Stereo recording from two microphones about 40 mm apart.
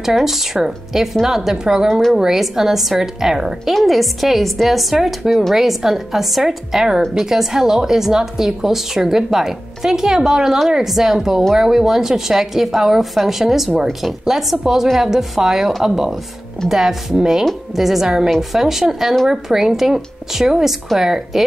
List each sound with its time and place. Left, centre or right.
0.1 s a woman's voice: centre
1.9 s a woman's voice: centre
2.1 s a woman's voice: centre
3.7 s a woman's voice: centre